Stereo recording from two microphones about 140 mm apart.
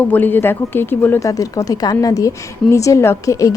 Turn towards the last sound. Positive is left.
turn(degrees=25)  # may be behind; listen again after turning